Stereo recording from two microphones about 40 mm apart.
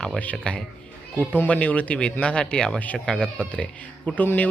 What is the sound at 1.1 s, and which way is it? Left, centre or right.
Speech, left.